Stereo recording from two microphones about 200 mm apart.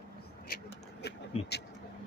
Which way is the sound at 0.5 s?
55° left (ahead or behind).